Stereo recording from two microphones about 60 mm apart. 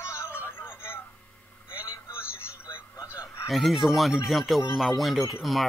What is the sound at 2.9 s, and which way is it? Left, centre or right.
Radio, left.